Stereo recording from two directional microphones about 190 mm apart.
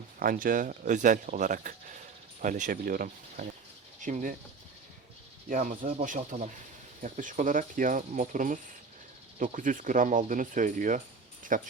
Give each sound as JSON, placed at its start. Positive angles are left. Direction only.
{"t": 0.2, "sound": "speech", "side_deg": -45}
{"t": 5.5, "sound": "speech", "side_deg": -45}